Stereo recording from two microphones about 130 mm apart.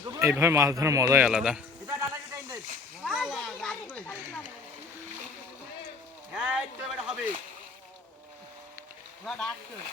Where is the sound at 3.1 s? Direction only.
5° right (ahead or behind); by 4.1 s 15° left (ahead or behind).